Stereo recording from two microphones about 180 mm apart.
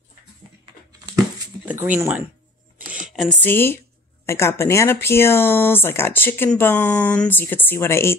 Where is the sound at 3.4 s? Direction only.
10° left (ahead or behind).